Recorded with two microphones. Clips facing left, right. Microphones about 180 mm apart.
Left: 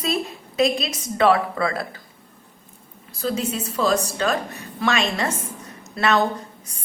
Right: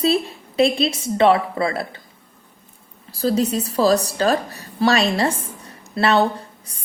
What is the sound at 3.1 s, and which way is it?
A woman's voice, 35° right (ahead or behind).